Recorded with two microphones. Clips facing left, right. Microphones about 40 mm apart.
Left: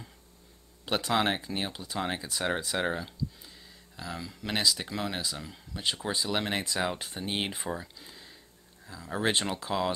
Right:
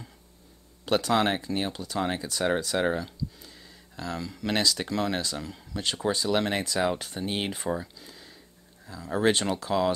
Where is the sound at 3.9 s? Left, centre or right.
Centre.